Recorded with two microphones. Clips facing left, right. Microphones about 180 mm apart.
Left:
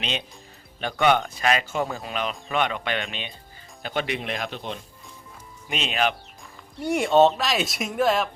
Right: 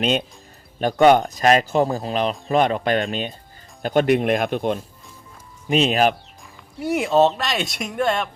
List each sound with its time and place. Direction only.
0.0 s speech: 45° right (ahead or behind)
5.6 s speech: 40° right (ahead or behind)
6.7 s speech: centre (ahead or behind)